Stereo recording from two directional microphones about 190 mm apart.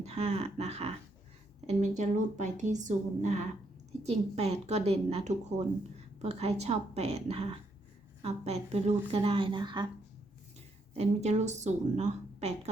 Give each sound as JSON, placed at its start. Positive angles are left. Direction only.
{"t": 0.0, "sound": "a woman's voice", "side_deg": -35}
{"t": 10.9, "sound": "a woman's voice", "side_deg": -35}